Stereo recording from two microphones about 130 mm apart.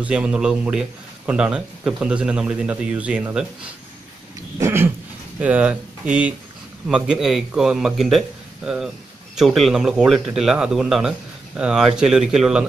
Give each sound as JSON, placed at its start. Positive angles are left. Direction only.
{"t": 0.0, "sound": "a man's voice", "side_deg": -10}
{"t": 4.6, "sound": "a sound", "side_deg": -20}
{"t": 5.4, "sound": "a man's voice", "side_deg": -10}